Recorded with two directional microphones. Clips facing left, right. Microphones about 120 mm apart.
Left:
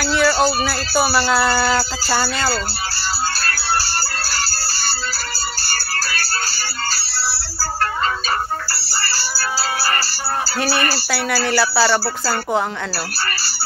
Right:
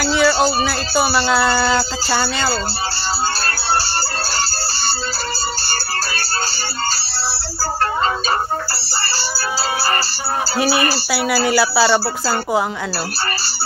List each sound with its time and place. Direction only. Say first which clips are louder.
0.0 s music: right 1 dB; centre (ahead or behind)
0.7 s speech: right 1 dB; centre (ahead or behind)
1.6 s speech: right 1 dB; 25° right (ahead or behind)
2.0 s speech: right 1 dB; centre (ahead or behind)
3.3 s music: right 2 dB; 25° right (ahead or behind)
8.7 s music: right 2 dB; 25° right (ahead or behind)
10.6 s speech: right 4 dB; 15° right (ahead or behind)
11.1 s speech: right 3 dB; 10° right (ahead or behind)
11.8 s speech: right 2 dB; 20° right (ahead or behind)